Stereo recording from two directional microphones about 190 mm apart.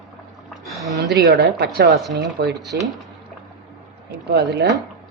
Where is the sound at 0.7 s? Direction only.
Centre (ahead or behind).